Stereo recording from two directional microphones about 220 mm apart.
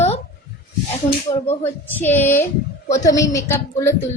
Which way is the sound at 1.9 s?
10° left (ahead or behind).